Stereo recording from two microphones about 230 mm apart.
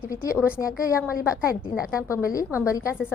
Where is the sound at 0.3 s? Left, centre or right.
Centre.